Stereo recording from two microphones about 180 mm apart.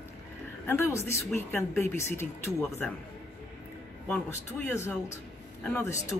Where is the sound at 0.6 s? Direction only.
15° left (ahead or behind).